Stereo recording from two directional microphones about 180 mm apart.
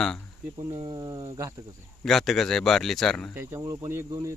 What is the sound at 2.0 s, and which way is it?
A man's voice, centre (ahead or behind).